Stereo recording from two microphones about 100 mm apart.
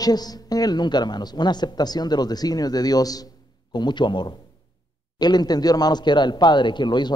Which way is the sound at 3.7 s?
50° left (ahead or behind).